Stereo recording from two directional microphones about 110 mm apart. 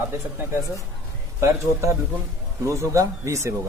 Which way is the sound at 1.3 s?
25° right (ahead or behind).